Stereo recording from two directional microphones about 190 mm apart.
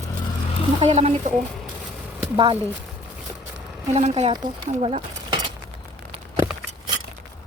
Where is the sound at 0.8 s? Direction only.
35° right (ahead or behind).